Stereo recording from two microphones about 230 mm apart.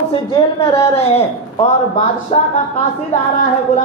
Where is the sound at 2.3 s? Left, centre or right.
Left.